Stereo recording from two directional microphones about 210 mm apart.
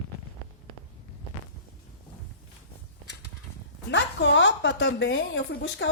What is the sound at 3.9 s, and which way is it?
A woman's voice, 60° left (ahead or behind).